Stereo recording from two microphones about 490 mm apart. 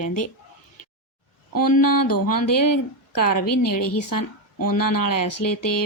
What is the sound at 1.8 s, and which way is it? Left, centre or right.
Speech, left.